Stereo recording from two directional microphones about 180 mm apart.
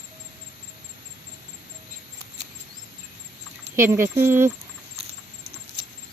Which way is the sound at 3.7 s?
15° right (ahead or behind).